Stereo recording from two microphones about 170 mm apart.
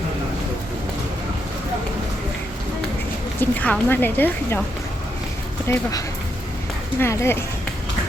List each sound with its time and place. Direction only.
3.4 s a woman's voice: 10° left (ahead or behind)
5.6 s a woman's voice: 15° left (ahead or behind)
7.0 s a woman's voice: 15° left (ahead or behind)